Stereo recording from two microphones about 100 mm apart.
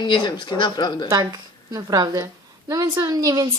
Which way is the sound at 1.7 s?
35° right (ahead or behind).